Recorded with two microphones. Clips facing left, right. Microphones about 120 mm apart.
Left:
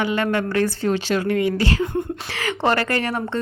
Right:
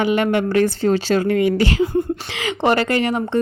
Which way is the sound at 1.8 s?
Centre (ahead or behind).